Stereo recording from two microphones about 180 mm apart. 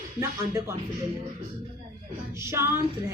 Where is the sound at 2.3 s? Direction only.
15° right (ahead or behind).